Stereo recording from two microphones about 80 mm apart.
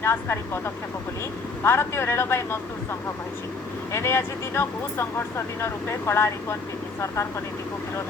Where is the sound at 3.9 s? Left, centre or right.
Left.